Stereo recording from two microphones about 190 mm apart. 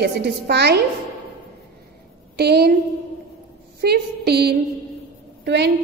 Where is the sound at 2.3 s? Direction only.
60° right (ahead or behind).